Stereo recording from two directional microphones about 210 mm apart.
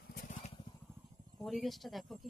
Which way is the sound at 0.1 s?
45° left (ahead or behind).